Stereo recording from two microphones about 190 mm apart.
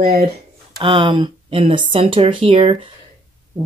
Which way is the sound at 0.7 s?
25° right (ahead or behind).